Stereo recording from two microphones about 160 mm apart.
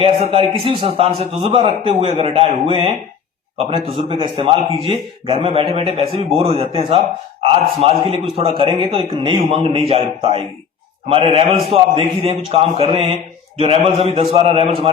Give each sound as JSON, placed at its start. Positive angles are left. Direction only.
{"t": 0.0, "sound": "a man's voice", "side_deg": -35}